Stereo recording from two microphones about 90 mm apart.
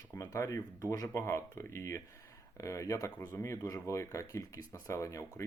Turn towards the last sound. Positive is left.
turn(degrees=35)  # may be behind; listen again after turning